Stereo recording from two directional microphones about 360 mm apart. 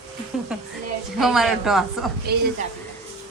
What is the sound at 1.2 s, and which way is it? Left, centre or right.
Speech, centre.